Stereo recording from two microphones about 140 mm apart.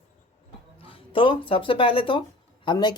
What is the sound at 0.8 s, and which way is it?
Speech, 40° left (ahead or behind).